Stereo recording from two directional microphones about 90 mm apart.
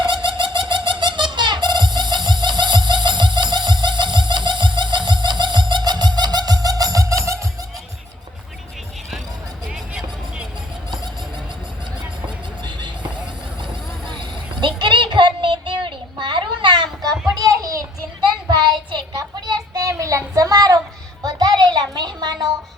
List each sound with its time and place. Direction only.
0.0 s music: 60° right (ahead or behind); by 7.4 s 35° right (ahead or behind)
14.1 s a sound: 60° right (ahead or behind)
17.4 s child singing: 40° right (ahead or behind)
18.4 s child singing: 60° right (ahead or behind)
19.1 s a sound: 45° right (ahead or behind)
21.2 s child singing: 50° right (ahead or behind)